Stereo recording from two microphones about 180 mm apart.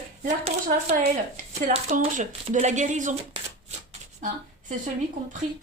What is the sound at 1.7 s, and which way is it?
Speech, 40° right (ahead or behind).